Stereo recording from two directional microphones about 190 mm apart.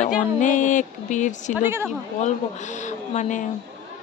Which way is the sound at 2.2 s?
40° left (ahead or behind).